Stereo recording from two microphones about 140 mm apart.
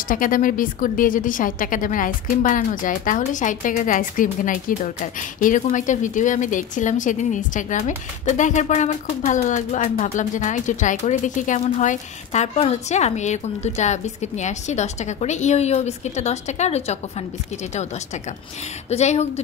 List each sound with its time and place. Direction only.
0.1 s a woman's voice: 75° left (ahead or behind); by 17.0 s 50° left (ahead or behind)
18.9 s speech: 50° left (ahead or behind)